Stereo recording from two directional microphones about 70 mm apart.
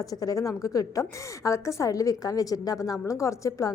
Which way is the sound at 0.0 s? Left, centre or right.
Left.